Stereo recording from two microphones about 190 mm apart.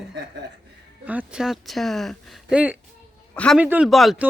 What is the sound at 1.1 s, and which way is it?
Speech, 5° right (ahead or behind).